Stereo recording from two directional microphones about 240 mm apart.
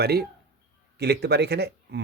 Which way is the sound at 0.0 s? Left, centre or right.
Right.